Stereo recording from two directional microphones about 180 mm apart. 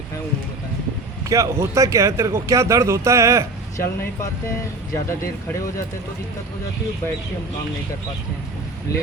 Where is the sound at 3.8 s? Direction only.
15° left (ahead or behind).